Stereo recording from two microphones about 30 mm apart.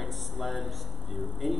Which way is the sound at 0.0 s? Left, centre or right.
Centre.